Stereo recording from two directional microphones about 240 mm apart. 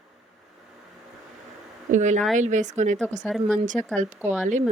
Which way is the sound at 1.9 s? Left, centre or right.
Right.